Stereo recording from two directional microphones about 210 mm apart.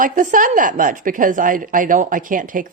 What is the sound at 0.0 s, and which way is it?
A woman's voice, 40° right (ahead or behind).